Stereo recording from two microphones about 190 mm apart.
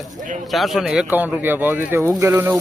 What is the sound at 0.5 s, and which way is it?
Speech, centre (ahead or behind).